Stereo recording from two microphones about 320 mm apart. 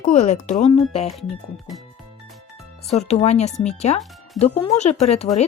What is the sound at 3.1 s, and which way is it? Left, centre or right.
Speech, centre.